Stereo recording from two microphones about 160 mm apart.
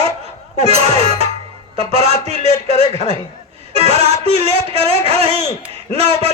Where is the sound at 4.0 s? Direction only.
35° right (ahead or behind).